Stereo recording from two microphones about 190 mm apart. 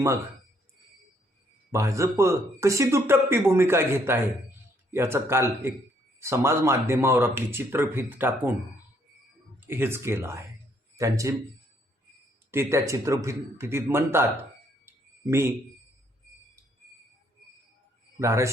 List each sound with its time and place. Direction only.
1.7 s speech: 15° right (ahead or behind)
9.6 s a man's voice: 10° right (ahead or behind)
12.5 s speech: 15° right (ahead or behind)
15.3 s speech: 15° right (ahead or behind)
18.2 s speech: 15° right (ahead or behind)